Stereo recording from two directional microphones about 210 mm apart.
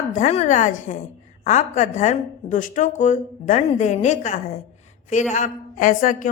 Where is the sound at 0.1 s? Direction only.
35° left (ahead or behind).